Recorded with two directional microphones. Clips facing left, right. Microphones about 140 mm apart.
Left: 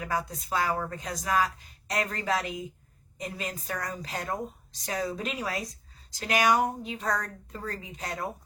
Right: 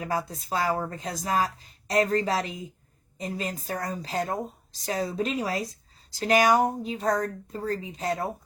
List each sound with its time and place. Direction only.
0.0 s speech: 30° right (ahead or behind)